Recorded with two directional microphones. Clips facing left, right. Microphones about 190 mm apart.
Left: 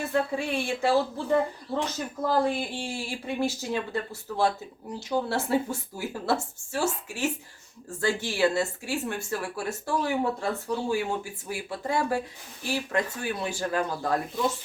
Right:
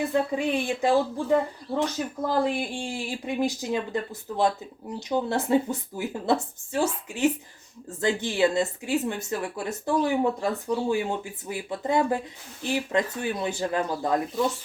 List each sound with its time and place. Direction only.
0.0 s a woman's voice: 15° right (ahead or behind)